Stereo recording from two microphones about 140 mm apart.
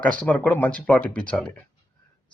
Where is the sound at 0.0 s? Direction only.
10° left (ahead or behind).